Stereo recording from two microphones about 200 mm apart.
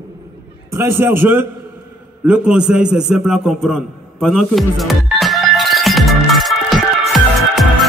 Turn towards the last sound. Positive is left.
turn(degrees=0)  # may be behind; listen again after turning